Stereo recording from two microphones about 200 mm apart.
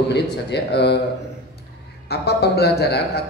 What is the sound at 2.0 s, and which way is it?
A man's voice, 55° left (ahead or behind).